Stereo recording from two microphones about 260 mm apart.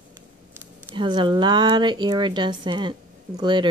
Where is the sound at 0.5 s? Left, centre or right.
Centre.